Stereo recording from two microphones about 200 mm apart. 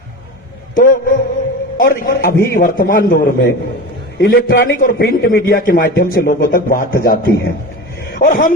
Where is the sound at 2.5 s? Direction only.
45° left (ahead or behind).